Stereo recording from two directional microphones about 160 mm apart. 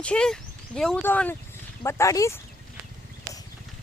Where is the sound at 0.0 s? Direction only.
5° left (ahead or behind).